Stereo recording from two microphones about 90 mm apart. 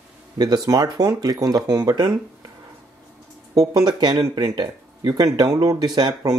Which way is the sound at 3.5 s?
50° right (ahead or behind).